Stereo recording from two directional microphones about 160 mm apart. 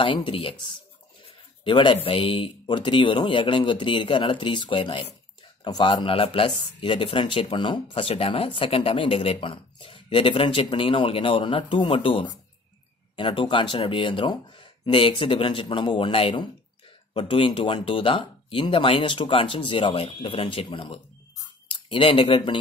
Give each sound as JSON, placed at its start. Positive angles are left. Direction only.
{"t": 0.0, "sound": "speech", "side_deg": 35}